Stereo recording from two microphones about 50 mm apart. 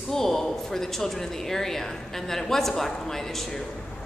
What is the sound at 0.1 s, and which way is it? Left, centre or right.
A woman's voice, centre.